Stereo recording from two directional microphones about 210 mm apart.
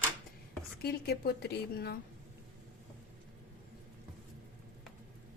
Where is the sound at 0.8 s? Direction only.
50° left (ahead or behind).